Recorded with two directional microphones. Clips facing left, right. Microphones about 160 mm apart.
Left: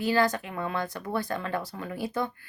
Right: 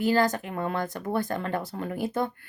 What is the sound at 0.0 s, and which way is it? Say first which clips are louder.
Speech: right 2 dB; 45° right (ahead or behind).